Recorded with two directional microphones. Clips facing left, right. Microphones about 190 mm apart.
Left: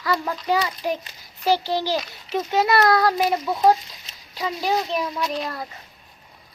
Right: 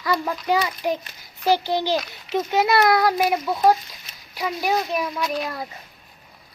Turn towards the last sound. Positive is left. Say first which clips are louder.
# right 1 dB
turn(degrees=-10)  # may be behind; listen again after turning